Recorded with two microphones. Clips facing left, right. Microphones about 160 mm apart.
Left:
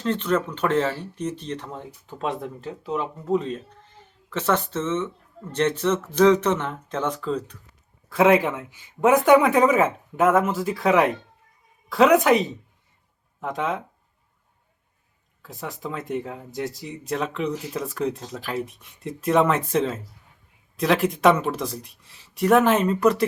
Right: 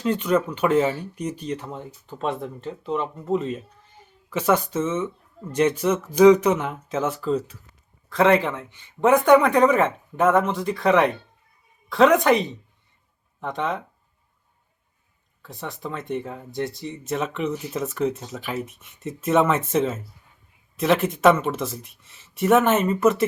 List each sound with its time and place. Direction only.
0.0 s speech: 10° right (ahead or behind)
8.1 s speech: 5° left (ahead or behind)
15.4 s speech: centre (ahead or behind)